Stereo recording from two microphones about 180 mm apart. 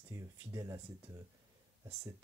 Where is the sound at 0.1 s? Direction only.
15° right (ahead or behind).